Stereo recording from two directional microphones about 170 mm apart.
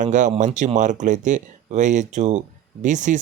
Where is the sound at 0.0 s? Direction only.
45° right (ahead or behind).